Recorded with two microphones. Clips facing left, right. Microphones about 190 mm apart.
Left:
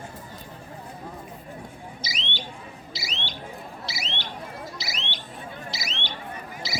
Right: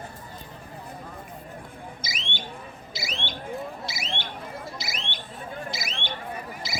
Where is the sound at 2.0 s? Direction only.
50° right (ahead or behind).